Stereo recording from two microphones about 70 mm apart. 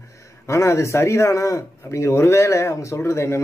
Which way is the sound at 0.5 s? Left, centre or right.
Left.